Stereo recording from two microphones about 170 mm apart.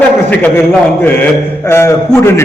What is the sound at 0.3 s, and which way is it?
A man's voice, 10° left (ahead or behind).